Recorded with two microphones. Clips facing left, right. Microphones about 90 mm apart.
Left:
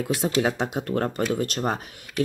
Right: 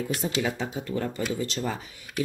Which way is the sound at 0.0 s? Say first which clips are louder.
Left 5 dB; 80° left.